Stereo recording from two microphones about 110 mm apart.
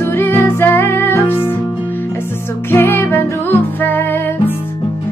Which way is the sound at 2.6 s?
20° left (ahead or behind).